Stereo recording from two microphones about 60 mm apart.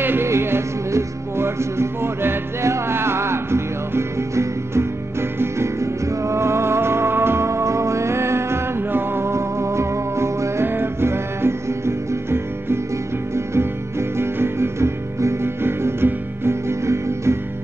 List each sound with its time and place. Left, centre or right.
0.0 s music: right